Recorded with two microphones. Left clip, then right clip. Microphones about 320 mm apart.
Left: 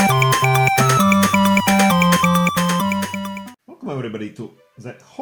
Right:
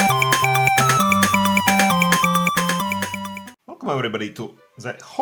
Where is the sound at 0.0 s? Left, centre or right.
Centre.